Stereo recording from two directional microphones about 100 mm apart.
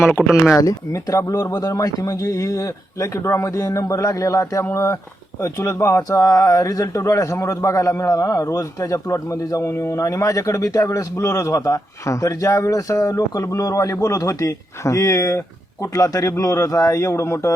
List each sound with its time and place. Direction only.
0.2 s speech: 5° left (ahead or behind)
0.5 s speech: 35° left (ahead or behind)